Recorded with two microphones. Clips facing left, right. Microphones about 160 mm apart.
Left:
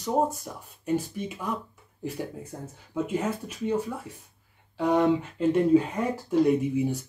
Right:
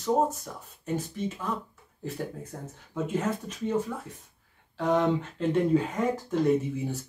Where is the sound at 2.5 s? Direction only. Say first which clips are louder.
Left 4 dB; 10° left (ahead or behind).